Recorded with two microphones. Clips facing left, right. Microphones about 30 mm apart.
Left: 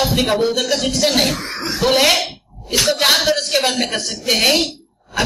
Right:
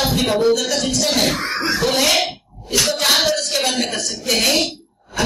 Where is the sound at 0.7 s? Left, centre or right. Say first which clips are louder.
Left 2 dB; left.